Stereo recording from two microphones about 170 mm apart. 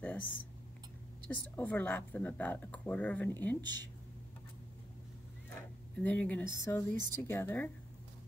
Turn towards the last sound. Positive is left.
turn(degrees=15)  # may be behind; listen again after turning